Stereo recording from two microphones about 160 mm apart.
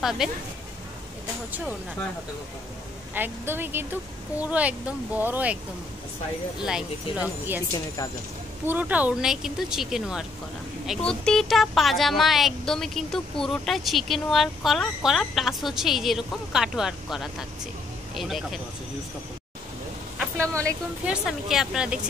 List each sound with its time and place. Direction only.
0.2 s speech: centre (ahead or behind)
3.2 s speech: 15° right (ahead or behind)
6.6 s speech: 5° right (ahead or behind)
8.6 s speech: 10° right (ahead or behind)
20.2 s a sound: 15° right (ahead or behind)
21.0 s speech: 5° right (ahead or behind)